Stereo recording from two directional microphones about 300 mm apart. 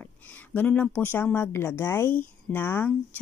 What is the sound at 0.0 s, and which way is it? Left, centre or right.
Speech, centre.